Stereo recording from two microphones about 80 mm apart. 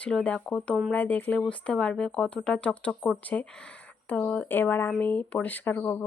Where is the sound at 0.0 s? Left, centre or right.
Centre.